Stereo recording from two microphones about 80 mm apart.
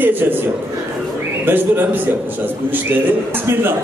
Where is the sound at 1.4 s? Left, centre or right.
Right.